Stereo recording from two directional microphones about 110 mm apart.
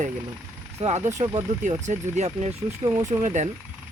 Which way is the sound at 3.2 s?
90° right.